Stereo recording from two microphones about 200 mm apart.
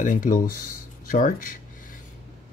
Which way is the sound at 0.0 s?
40° left (ahead or behind).